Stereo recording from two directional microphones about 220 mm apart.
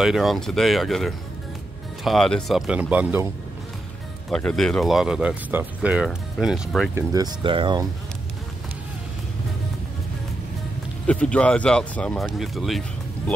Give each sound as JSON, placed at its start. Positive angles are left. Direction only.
{"t": 0.0, "sound": "speech", "side_deg": 0}
{"t": 4.3, "sound": "speech", "side_deg": 5}
{"t": 7.0, "sound": "speech", "side_deg": -15}
{"t": 11.1, "sound": "speech", "side_deg": 5}